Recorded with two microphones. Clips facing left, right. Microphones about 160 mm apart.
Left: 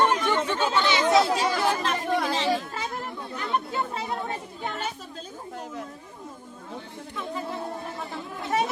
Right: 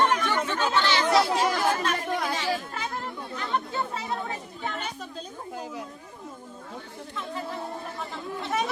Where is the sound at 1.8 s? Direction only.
25° left (ahead or behind).